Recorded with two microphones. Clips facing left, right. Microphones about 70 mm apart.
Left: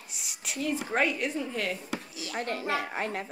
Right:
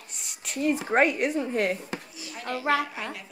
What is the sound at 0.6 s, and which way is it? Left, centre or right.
Speech, right.